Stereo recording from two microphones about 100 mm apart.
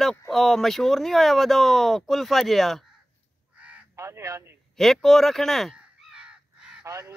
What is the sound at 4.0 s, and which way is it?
Speech, 30° right (ahead or behind).